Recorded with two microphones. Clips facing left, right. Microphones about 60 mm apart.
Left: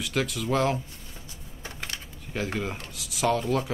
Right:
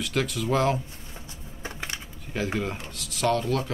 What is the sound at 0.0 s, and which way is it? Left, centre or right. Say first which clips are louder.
Speech: right 1 dB; centre.